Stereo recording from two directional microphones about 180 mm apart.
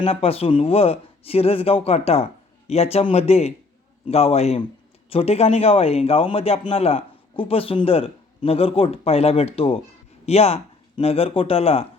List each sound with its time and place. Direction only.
0.0 s speech: 35° left (ahead or behind)